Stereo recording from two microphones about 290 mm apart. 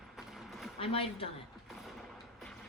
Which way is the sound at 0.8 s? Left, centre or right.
Centre.